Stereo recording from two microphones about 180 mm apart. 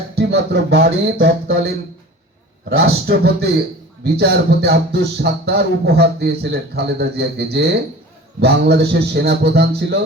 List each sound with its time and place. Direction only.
0.2 s speech: 65° right (ahead or behind); by 1.6 s 85° right
2.6 s speech: 60° right (ahead or behind)